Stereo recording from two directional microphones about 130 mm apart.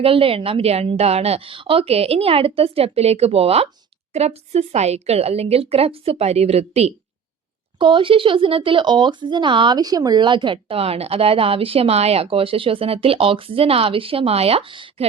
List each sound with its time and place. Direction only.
0.0 s speech: 45° right (ahead or behind)
7.8 s speech: 40° right (ahead or behind)